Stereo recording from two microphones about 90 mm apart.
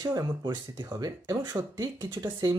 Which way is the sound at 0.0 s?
45° right (ahead or behind).